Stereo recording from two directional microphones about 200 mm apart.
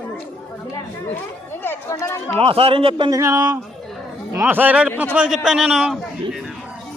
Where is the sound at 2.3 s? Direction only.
30° right (ahead or behind).